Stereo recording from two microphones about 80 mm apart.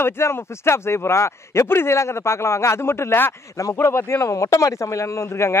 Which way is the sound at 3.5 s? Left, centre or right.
Left.